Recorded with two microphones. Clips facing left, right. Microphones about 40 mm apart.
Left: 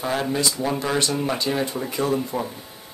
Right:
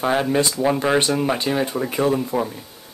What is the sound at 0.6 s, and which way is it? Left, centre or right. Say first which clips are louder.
Speech: right 5 dB; right.